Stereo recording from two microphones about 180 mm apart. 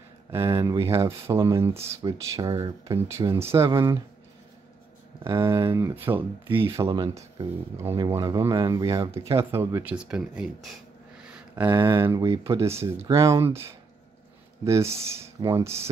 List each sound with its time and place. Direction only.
0.3 s speech: 15° right (ahead or behind)
5.2 s speech: 15° right (ahead or behind)
6.9 s speech: 25° right (ahead or behind)
14.6 s speech: 15° right (ahead or behind)